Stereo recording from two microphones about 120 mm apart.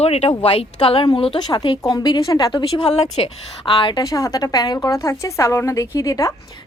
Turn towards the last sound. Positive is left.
turn(degrees=30)  # may be behind; listen again after turning